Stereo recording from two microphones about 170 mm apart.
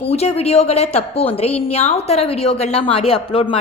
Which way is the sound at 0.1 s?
40° left (ahead or behind).